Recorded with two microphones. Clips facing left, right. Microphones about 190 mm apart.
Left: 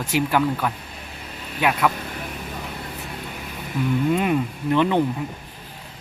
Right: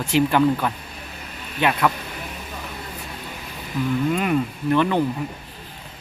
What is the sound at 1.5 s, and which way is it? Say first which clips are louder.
Speech: right 1 dB; 5° left (ahead or behind).